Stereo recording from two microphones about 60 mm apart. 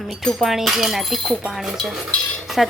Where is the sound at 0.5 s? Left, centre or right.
Centre.